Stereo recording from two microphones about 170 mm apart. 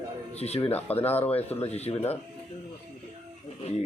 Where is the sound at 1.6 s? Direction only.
40° left (ahead or behind).